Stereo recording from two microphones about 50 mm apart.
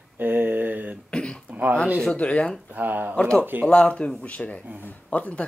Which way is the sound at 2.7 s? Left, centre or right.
Right.